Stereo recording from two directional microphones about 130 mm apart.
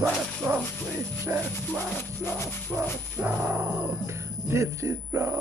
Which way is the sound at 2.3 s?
20° left (ahead or behind).